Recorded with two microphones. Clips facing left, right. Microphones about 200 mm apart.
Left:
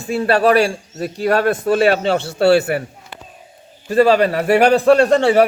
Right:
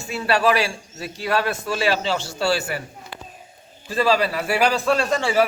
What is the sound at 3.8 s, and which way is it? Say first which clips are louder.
A man's voice: left 7 dB; 60° left (ahead or behind).